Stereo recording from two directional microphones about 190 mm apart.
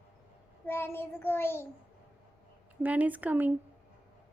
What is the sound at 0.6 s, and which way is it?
Child singing, 10° left (ahead or behind).